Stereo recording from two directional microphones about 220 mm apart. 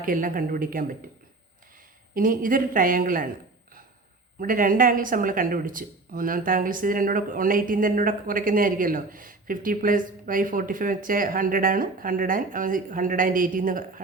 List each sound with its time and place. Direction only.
0.0 s speech: 40° right (ahead or behind)
2.1 s speech: 40° right (ahead or behind)
4.4 s speech: 40° right (ahead or behind)